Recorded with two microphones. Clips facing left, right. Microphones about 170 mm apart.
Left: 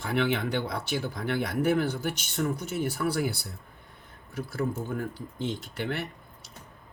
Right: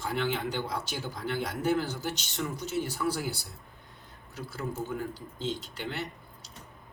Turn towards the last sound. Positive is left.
turn(degrees=55)  # may be behind; listen again after turning